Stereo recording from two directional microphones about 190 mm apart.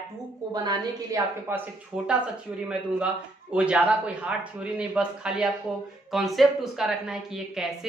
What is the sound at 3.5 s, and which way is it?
A woman's voice, 5° right (ahead or behind).